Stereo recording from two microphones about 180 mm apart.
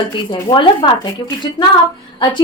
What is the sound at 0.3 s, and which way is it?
Speech, 25° left (ahead or behind).